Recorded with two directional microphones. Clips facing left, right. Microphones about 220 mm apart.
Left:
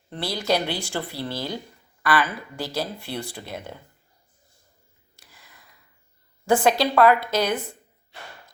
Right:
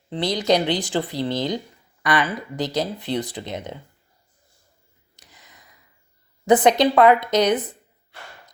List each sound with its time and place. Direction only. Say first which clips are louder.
0.1 s a woman's voice: right 5 dB; 20° right (ahead or behind)
5.1 s a sound: right 2 dB; 20° right (ahead or behind)
6.4 s a woman's voice: right 4 dB; 20° right (ahead or behind)